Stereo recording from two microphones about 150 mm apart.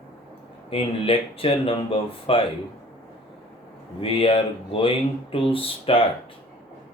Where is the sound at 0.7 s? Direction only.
40° left (ahead or behind).